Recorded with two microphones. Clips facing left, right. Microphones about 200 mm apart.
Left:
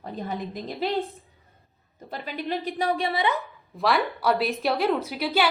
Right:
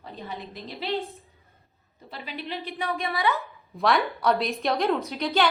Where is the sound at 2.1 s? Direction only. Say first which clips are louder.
Left 5 dB; 45° left (ahead or behind); by 3.4 s 20° left (ahead or behind).